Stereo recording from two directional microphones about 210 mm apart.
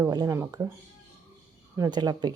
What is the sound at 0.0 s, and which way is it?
Speech, 15° right (ahead or behind).